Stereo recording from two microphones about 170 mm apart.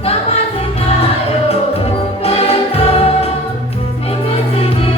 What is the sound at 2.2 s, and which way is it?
Music, 35° left (ahead or behind).